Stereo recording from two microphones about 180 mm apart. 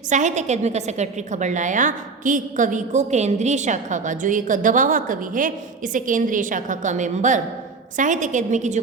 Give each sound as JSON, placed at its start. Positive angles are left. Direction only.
{"t": 0.1, "sound": "a woman's voice", "side_deg": -40}